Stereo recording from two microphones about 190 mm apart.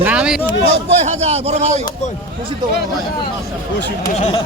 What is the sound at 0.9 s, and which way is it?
Speech, 35° right (ahead or behind).